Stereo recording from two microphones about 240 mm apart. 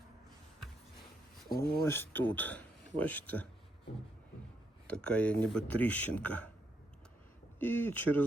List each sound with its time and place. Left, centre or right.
1.5 s speech: left
1.8 s speech: centre
4.9 s speech: centre
7.6 s speech: centre